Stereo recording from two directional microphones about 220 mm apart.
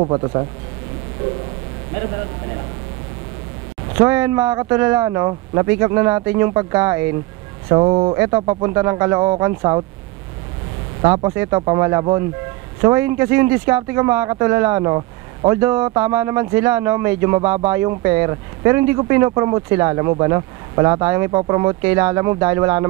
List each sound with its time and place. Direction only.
0.0 s speech: 20° right (ahead or behind)
4.0 s speech: 10° right (ahead or behind)
11.0 s speech: 20° right (ahead or behind)